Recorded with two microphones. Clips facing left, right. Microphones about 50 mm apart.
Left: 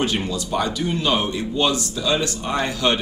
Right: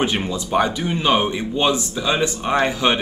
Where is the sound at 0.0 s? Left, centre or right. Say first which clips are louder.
Right 1 dB; right.